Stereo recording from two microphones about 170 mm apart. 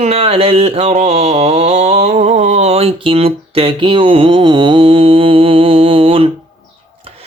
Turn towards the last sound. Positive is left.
turn(degrees=-30)  # may be behind; listen again after turning